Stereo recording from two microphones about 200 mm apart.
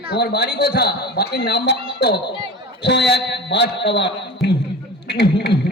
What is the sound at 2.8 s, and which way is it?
A man's voice, 60° left (ahead or behind).